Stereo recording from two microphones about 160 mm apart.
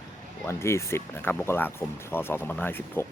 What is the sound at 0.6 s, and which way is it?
Speech, 15° left (ahead or behind).